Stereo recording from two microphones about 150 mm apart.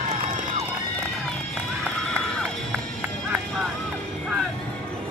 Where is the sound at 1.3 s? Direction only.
5° left (ahead or behind).